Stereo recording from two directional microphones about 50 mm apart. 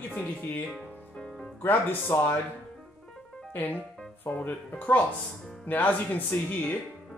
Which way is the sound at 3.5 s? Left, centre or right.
Left.